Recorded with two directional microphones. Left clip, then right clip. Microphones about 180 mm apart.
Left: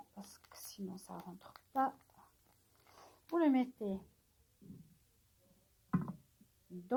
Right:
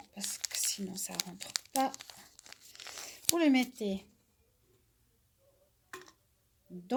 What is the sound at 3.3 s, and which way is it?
Speech, 40° right (ahead or behind).